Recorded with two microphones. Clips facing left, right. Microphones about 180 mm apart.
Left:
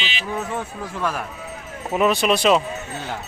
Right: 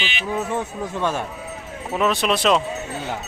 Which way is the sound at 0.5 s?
20° right (ahead or behind).